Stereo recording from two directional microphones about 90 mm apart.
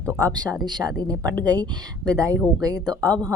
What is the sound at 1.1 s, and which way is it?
Speech, 40° right (ahead or behind).